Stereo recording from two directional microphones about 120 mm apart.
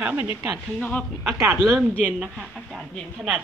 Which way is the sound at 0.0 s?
15° right (ahead or behind).